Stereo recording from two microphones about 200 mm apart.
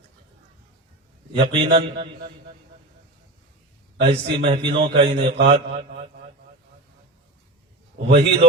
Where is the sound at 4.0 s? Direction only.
30° right (ahead or behind).